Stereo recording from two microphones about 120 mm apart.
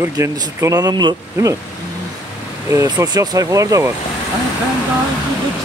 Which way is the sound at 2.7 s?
30° right (ahead or behind).